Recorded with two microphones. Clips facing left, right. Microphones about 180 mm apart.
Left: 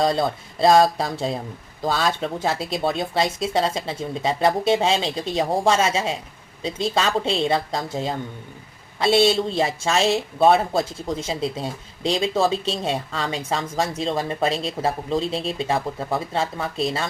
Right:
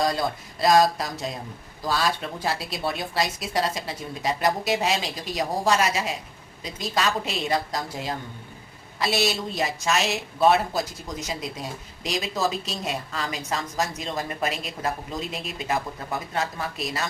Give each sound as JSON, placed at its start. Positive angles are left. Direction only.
{"t": 0.0, "sound": "speech", "side_deg": 25}